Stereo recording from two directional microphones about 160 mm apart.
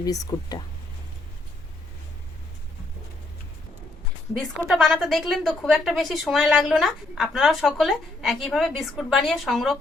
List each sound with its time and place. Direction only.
0.0 s speech: 20° left (ahead or behind)
4.5 s a woman's voice: centre (ahead or behind)